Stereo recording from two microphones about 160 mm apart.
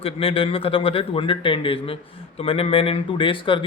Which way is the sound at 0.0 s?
35° left (ahead or behind).